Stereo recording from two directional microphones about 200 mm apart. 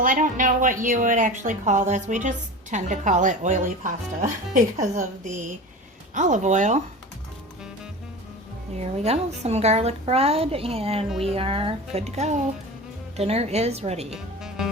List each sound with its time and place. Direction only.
0.0 s speech: 40° right (ahead or behind)
8.7 s a woman's voice: 35° right (ahead or behind)
14.1 s speech: 5° right (ahead or behind)